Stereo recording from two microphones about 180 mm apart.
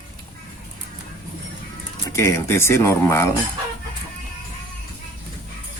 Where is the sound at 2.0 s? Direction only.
15° left (ahead or behind).